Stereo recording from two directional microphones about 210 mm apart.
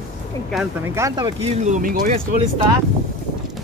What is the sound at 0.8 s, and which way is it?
Speech, 15° right (ahead or behind).